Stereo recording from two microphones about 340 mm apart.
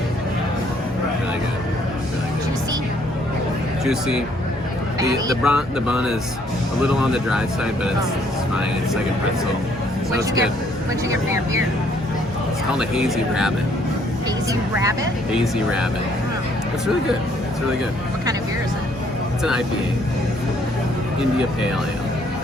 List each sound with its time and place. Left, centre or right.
3.8 s speech: centre
10.1 s speech: centre
12.7 s speech: centre
14.8 s speech: centre